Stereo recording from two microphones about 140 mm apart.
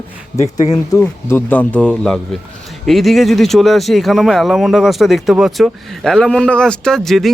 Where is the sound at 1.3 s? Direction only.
10° left (ahead or behind).